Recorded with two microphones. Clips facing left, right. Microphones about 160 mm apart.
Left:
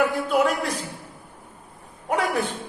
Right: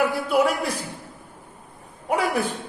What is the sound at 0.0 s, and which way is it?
Speech, 10° right (ahead or behind).